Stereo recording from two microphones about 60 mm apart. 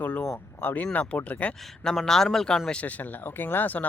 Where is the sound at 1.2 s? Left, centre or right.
Left.